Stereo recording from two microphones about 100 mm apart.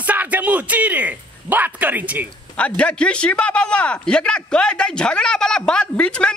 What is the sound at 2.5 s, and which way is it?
A man's voice, 10° left (ahead or behind).